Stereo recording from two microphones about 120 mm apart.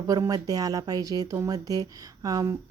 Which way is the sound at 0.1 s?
30° right (ahead or behind).